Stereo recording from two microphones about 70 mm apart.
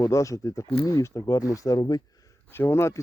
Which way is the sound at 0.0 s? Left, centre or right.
Left.